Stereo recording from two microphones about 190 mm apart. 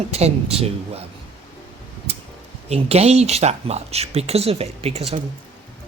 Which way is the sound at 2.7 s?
35° right (ahead or behind).